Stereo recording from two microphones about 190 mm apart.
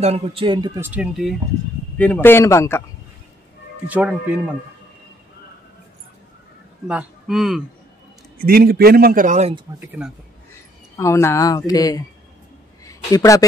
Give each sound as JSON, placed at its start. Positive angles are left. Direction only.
{"t": 0.0, "sound": "speech", "side_deg": -30}
{"t": 2.0, "sound": "a man's voice", "side_deg": 10}
{"t": 3.8, "sound": "speech", "side_deg": -5}
{"t": 6.9, "sound": "speech", "side_deg": -5}
{"t": 8.5, "sound": "a man's voice", "side_deg": -55}
{"t": 9.8, "sound": "speech", "side_deg": -5}
{"t": 11.0, "sound": "speech", "side_deg": 15}